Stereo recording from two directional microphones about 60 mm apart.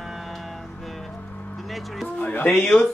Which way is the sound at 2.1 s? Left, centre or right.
Left.